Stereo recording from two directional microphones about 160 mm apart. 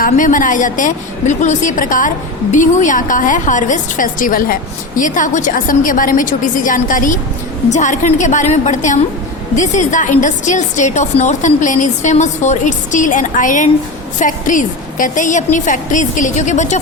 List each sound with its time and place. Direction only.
0.0 s a woman's voice: 55° left (ahead or behind)